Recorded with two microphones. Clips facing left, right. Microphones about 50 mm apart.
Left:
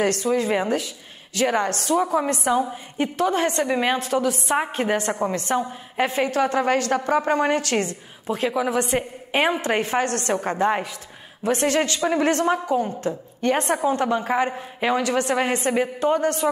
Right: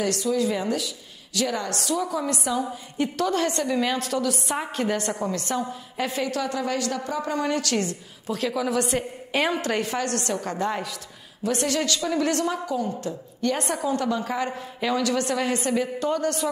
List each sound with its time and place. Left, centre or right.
0.0 s a woman's voice: left
2.7 s a woman's voice: left